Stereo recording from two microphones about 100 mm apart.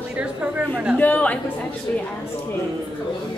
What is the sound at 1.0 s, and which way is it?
Speech, 15° left (ahead or behind).